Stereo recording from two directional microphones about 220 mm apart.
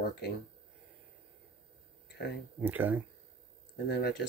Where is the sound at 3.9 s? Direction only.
50° left (ahead or behind).